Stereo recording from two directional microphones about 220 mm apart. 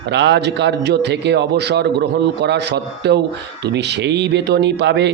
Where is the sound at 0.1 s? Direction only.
50° right (ahead or behind).